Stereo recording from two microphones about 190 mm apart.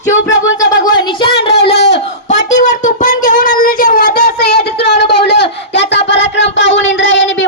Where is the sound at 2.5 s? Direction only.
40° left (ahead or behind).